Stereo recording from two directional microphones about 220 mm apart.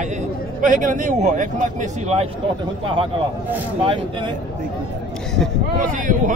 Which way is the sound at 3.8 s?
25° right (ahead or behind).